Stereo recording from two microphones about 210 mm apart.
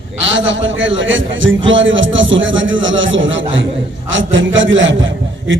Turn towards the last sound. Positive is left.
turn(degrees=-65)  # may be behind; listen again after turning